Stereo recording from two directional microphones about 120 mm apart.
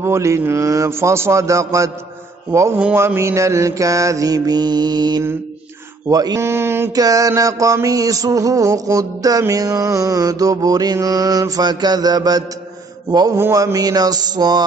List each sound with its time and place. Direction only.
0.0 s mantra: 25° right (ahead or behind)
2.8 s mantra: 15° right (ahead or behind); by 14.6 s 35° right (ahead or behind)